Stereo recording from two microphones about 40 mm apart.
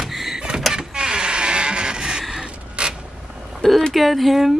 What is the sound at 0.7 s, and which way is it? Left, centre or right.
Power windows, centre.